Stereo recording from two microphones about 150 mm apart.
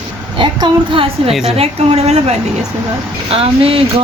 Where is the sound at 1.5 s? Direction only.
45° right (ahead or behind).